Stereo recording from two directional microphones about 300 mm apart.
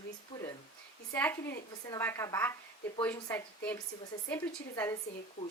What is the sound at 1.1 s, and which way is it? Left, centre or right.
Speech, centre.